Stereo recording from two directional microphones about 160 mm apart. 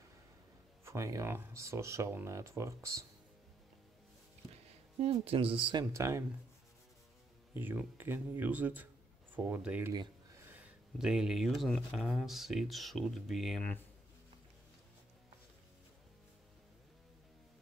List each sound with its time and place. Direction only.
0.8 s speech: 20° right (ahead or behind)
5.0 s speech: 40° right (ahead or behind)
5.9 s speech: 20° right (ahead or behind)
7.5 s speech: 15° right (ahead or behind)